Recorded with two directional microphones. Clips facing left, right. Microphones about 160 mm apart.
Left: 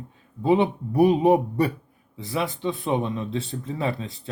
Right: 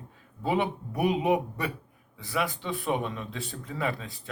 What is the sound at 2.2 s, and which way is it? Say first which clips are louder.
Speech: left 3 dB; 25° left (ahead or behind).